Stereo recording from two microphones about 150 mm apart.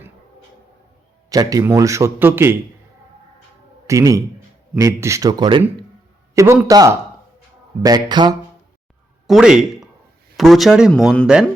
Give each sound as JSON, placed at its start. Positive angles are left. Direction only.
{"t": 1.3, "sound": "a man's voice", "side_deg": -25}
{"t": 3.8, "sound": "a man's voice", "side_deg": -20}
{"t": 6.3, "sound": "a man's voice", "side_deg": -20}
{"t": 9.2, "sound": "speech", "side_deg": -5}